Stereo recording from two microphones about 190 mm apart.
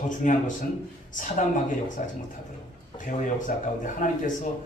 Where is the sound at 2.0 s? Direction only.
40° left (ahead or behind).